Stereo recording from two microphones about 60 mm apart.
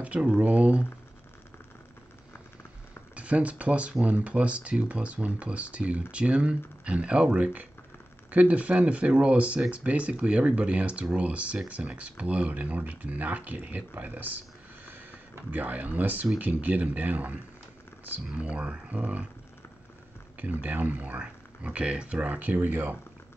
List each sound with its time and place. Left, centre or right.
0.0 s speech: right
3.2 s speech: right
20.6 s speech: right